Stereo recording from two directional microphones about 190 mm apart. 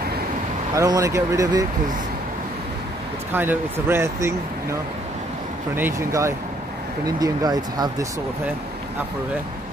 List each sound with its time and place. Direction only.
0.7 s speech: 15° right (ahead or behind)
3.3 s speech: 10° right (ahead or behind)
5.8 s speech: 15° right (ahead or behind)